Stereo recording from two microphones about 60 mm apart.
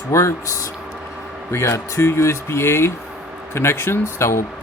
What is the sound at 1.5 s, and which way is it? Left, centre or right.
Speech, left.